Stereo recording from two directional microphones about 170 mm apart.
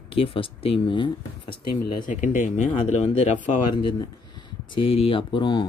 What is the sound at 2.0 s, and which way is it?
Speech, 50° left (ahead or behind).